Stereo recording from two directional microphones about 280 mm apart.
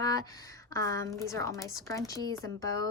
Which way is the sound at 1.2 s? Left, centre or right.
Centre.